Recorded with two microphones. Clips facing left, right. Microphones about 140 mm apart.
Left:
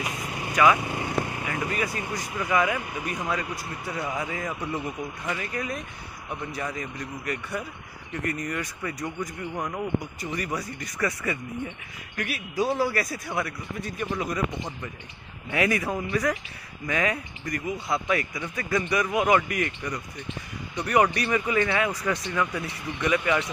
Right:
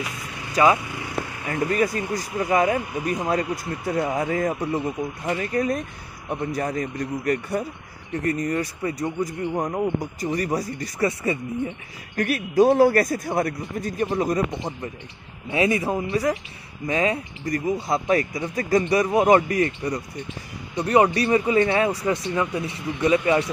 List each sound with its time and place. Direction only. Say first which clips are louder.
0.5 s speech: right 2 dB; 30° right (ahead or behind)
1.5 s speech: right 9 dB; 40° right (ahead or behind)
12.2 s a man's voice: right 9 dB; 45° right (ahead or behind)
15.5 s speech: right 4 dB; 25° right (ahead or behind)